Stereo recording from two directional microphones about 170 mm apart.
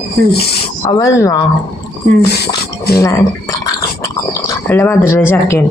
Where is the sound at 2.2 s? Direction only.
75° left (ahead or behind).